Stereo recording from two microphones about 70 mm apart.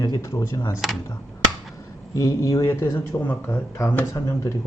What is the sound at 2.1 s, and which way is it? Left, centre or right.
Speech, left.